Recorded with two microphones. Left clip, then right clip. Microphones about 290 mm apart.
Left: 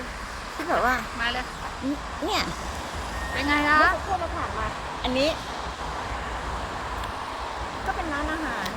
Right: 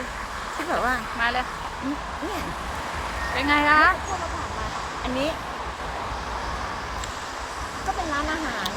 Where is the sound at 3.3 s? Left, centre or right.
Centre.